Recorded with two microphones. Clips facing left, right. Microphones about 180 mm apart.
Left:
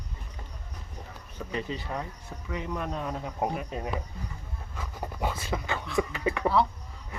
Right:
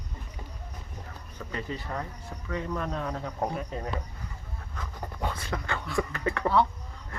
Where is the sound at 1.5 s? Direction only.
15° left (ahead or behind).